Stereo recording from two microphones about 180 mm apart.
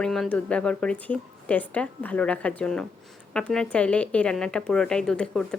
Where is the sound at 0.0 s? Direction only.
5° left (ahead or behind).